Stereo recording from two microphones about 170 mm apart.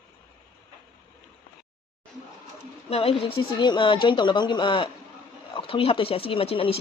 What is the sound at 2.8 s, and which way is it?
Speech, 35° left (ahead or behind).